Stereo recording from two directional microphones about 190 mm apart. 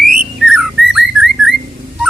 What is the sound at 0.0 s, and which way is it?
Whistling, 50° right (ahead or behind).